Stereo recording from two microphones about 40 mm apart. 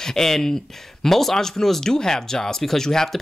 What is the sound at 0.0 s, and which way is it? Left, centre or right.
Speech, centre.